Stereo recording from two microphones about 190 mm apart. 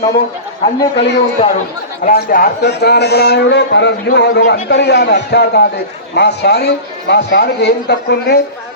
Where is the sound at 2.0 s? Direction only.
50° left (ahead or behind).